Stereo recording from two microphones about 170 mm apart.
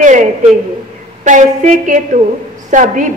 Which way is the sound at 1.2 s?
45° right (ahead or behind).